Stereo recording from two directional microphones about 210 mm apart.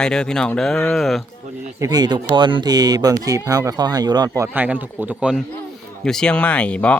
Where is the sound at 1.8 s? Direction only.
20° right (ahead or behind); by 6.9 s 5° left (ahead or behind).